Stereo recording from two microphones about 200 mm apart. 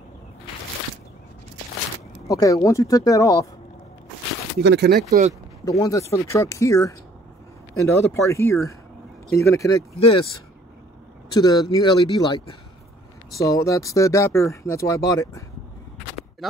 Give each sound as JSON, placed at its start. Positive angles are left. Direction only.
{"t": 2.2, "sound": "speech", "side_deg": 15}
{"t": 4.6, "sound": "speech", "side_deg": -60}
{"t": 4.9, "sound": "speech", "side_deg": -45}
{"t": 5.7, "sound": "speech", "side_deg": 15}
{"t": 9.9, "sound": "speech", "side_deg": 30}